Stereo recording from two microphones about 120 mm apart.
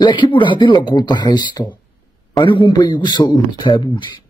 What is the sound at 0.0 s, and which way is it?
Speech, 40° left (ahead or behind).